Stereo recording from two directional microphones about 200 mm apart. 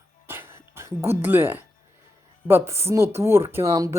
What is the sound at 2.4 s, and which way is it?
Speech, 10° right (ahead or behind).